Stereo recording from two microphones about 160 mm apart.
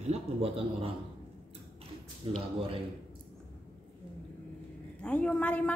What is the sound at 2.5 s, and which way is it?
Speech, 35° right (ahead or behind).